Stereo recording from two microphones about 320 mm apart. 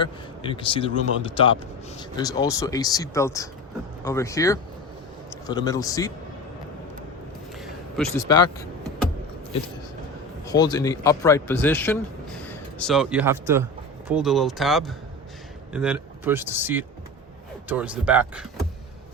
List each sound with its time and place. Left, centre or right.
0.0 s speech: centre
7.6 s a man's voice: centre
10.4 s a man's voice: centre